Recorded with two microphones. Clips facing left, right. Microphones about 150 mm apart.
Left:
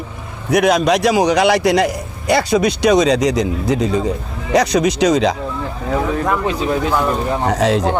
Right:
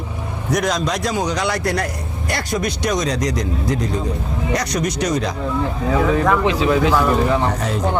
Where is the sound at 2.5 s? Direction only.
75° left (ahead or behind).